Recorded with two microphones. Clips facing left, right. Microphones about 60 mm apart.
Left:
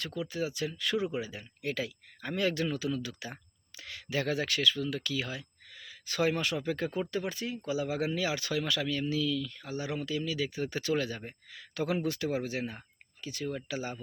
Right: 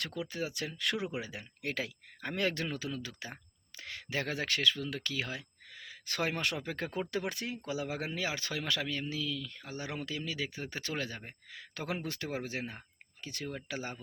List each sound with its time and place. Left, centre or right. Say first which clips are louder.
0.0 s speech: left 3 dB; right
1.7 s speech: left 2 dB; right
7.1 s speech: left 2 dB; right
7.7 s speech: left 6 dB; right